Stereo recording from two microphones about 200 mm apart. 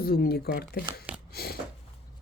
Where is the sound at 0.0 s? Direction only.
50° left (ahead or behind).